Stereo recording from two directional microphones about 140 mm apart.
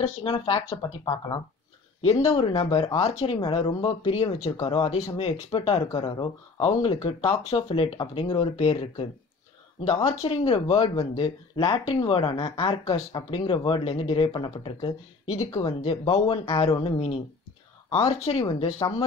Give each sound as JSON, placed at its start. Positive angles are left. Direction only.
{"t": 0.0, "sound": "speech", "side_deg": 45}
{"t": 1.0, "sound": "speech", "side_deg": 30}
{"t": 2.0, "sound": "speech", "side_deg": 45}
{"t": 18.4, "sound": "speech", "side_deg": 35}